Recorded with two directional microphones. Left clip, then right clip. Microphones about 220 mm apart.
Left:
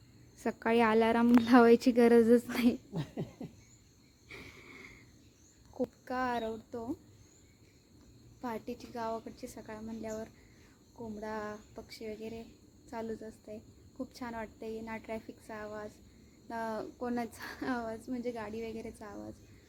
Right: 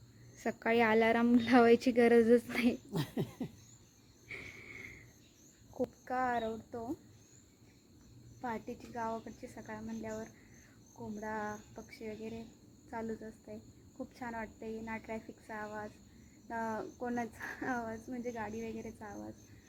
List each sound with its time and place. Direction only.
0.4 s a woman's voice: 15° left (ahead or behind)
2.9 s a sound: 55° right (ahead or behind)
4.3 s cricket: 15° left (ahead or behind)
5.7 s speech: 5° left (ahead or behind)
8.4 s a woman's voice: 10° left (ahead or behind)